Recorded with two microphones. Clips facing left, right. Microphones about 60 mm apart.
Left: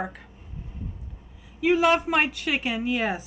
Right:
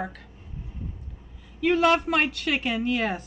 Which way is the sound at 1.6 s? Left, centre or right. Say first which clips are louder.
Even; centre.